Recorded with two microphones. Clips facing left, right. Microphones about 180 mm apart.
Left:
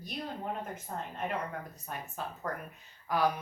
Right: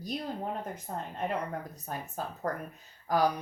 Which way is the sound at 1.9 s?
40° right (ahead or behind).